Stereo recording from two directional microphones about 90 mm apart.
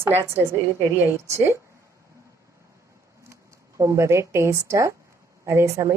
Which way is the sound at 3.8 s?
35° right (ahead or behind).